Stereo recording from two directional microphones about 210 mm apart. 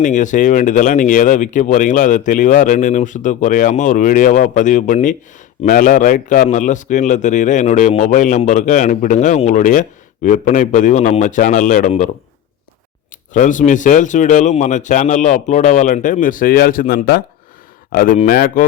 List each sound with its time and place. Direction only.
0.0 s speech: 35° left (ahead or behind)
13.3 s speech: 35° left (ahead or behind)